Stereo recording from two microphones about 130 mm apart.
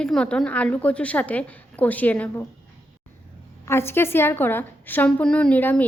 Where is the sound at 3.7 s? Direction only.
20° left (ahead or behind).